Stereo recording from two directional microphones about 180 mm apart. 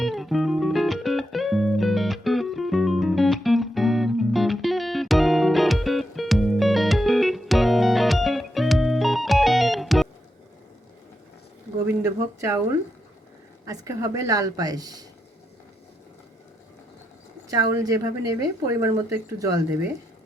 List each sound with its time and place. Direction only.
0.0 s music: centre (ahead or behind)
11.9 s a sound: 15° right (ahead or behind)
13.7 s a woman's voice: 20° right (ahead or behind)
17.5 s a woman's voice: 20° right (ahead or behind)